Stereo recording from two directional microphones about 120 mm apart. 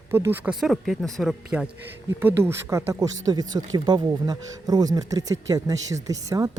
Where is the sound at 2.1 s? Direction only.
20° right (ahead or behind).